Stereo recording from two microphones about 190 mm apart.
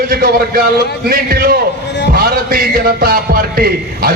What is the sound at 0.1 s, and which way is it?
Speech, 50° right (ahead or behind).